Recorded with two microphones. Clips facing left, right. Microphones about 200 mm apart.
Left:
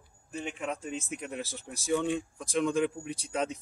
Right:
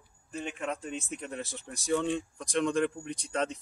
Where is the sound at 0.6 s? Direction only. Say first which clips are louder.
Even; centre (ahead or behind).